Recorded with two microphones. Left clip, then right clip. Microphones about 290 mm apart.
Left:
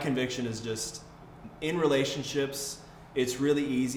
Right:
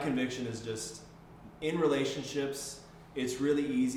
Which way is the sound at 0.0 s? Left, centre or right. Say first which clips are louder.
Left 3 dB; left.